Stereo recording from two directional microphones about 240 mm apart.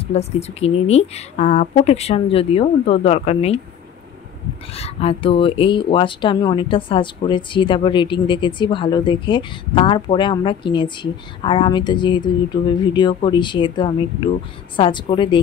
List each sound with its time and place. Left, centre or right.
0.1 s speech: left
4.7 s speech: left